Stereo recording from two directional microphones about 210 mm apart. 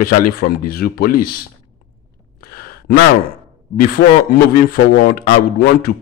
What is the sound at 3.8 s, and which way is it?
A man's voice, 45° left (ahead or behind).